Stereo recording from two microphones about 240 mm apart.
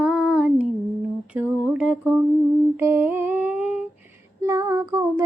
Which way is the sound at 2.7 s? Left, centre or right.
Centre.